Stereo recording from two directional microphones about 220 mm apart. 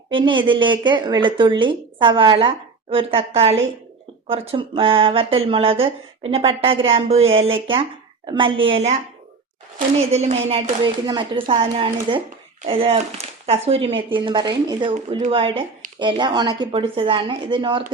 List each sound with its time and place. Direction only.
0.1 s a woman's voice: 20° right (ahead or behind)
10.1 s a woman's voice: 30° right (ahead or behind)